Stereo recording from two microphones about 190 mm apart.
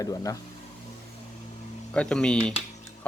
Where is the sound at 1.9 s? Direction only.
5° left (ahead or behind).